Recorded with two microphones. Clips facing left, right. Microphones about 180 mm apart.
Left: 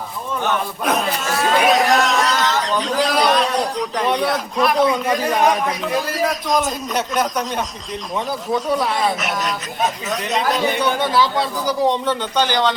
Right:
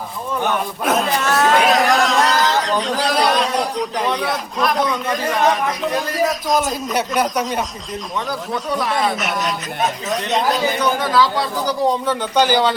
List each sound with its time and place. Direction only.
1.2 s a sound: 70° right (ahead or behind)
1.5 s chatter: centre (ahead or behind)
3.0 s a man's voice: centre (ahead or behind)
8.7 s a man's voice: centre (ahead or behind)
11.0 s speech: 25° left (ahead or behind)
11.9 s speech: 5° right (ahead or behind)